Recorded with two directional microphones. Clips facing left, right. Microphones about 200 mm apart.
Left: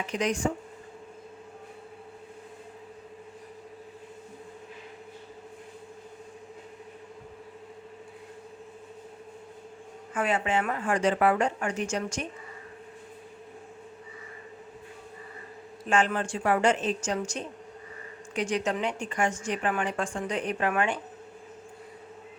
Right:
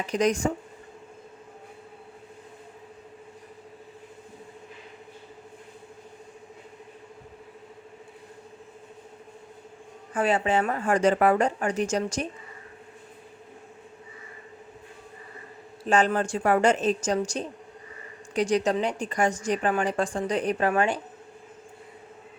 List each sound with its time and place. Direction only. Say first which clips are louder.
0.1 s a woman's voice: right 5 dB; 40° right (ahead or behind)
10.2 s a woman's voice: right 4 dB; 35° right (ahead or behind)
15.9 s a woman's voice: right 3 dB; 40° right (ahead or behind)